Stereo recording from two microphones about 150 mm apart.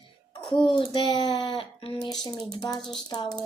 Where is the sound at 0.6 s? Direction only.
35° left (ahead or behind).